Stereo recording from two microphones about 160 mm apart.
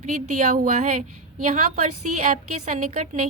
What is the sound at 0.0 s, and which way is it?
A woman's voice, 55° right (ahead or behind).